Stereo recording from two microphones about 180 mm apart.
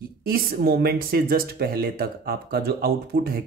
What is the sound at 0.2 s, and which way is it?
Speech, 55° right (ahead or behind).